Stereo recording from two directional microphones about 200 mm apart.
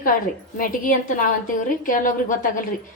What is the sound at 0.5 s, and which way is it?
A woman's voice, 45° left (ahead or behind).